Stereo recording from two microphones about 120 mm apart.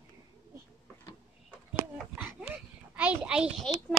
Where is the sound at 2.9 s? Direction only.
10° right (ahead or behind).